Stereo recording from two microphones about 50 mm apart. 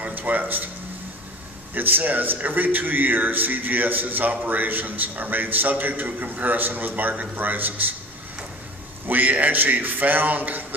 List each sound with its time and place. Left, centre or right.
0.0 s speech: right
1.7 s a man's voice: right
9.0 s a man's voice: right